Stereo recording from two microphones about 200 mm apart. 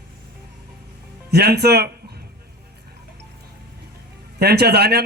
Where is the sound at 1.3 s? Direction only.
55° right (ahead or behind).